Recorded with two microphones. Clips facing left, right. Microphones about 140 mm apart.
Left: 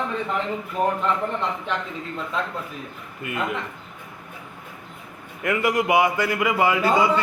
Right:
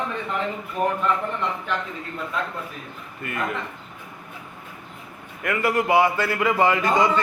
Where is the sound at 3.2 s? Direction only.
15° left (ahead or behind).